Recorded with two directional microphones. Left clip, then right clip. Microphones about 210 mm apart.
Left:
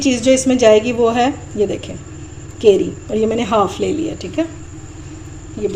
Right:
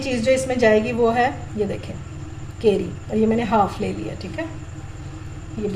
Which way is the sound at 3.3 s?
40° left (ahead or behind).